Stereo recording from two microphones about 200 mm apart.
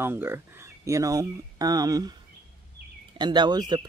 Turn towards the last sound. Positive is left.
turn(degrees=-20)  # may be behind; listen again after turning